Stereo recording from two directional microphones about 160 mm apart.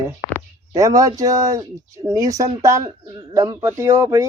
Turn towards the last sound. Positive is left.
turn(degrees=-15)  # may be behind; listen again after turning